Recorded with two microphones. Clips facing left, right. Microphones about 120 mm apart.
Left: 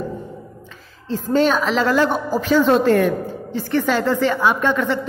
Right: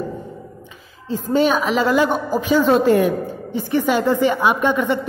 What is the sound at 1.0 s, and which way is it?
A woman's voice, 10° right (ahead or behind).